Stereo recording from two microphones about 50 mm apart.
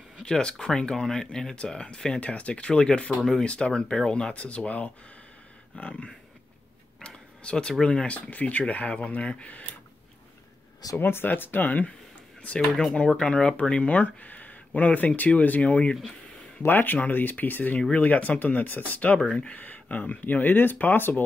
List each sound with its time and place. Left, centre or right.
0.2 s speech: centre
2.1 s speech: left
7.0 s a sound: centre
7.8 s speech: centre
8.1 s speech: left
11.0 s speech: left
12.9 s speech: centre
16.6 s speech: left